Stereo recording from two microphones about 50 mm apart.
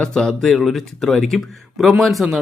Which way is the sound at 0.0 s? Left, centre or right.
Centre.